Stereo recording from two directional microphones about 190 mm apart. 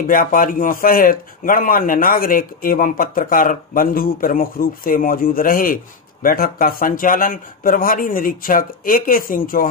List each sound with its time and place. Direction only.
0.0 s a man's voice: 45° left (ahead or behind)